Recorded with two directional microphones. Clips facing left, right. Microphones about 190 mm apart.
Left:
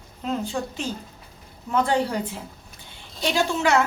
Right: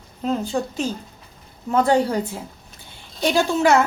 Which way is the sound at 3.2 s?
45° right (ahead or behind).